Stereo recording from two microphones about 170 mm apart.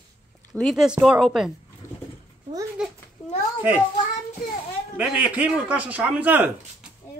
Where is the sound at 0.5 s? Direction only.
Centre (ahead or behind).